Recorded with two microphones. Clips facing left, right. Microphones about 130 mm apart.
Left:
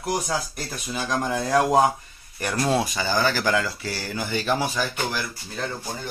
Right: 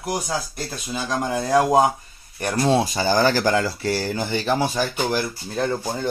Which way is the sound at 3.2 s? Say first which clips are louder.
Right 3 dB; 45° right (ahead or behind).